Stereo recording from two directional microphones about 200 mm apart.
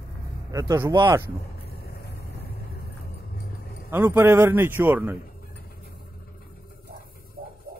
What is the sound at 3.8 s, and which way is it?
Speech, 10° right (ahead or behind).